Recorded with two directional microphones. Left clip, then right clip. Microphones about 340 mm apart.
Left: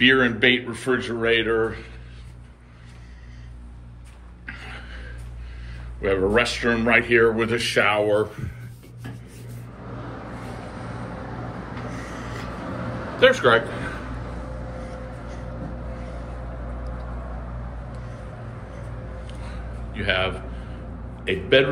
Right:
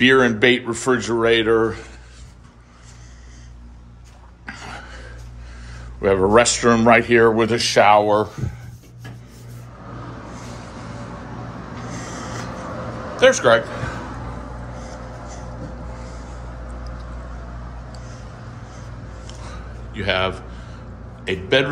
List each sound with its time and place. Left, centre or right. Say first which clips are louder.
0.0 s speech: right 3 dB; centre
5.9 s speech: right 6 dB; centre
8.1 s speech: right 3 dB; right
13.2 s a man's voice: right 3 dB; centre
19.2 s a sound: right 2 dB; centre
21.2 s a man's voice: even; centre